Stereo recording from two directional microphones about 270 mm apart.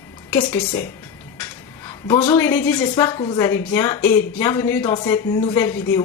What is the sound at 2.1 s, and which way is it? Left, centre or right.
A woman's voice, centre.